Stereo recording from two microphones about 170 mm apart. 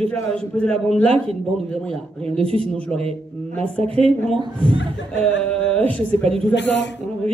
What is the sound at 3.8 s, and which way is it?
Speech, 35° right (ahead or behind).